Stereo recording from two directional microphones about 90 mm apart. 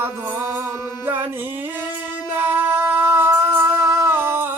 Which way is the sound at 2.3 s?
25° right (ahead or behind).